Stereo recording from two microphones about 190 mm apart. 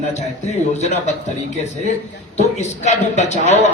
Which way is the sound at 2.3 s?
35° left (ahead or behind).